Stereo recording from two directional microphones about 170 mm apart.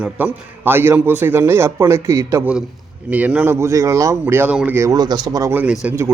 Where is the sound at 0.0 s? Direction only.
10° right (ahead or behind).